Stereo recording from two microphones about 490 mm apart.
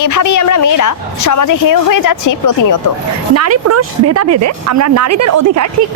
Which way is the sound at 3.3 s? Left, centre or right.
Right.